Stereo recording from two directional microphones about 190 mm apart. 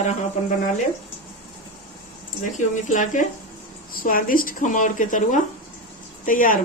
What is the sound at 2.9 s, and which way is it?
A woman's voice, 40° left (ahead or behind).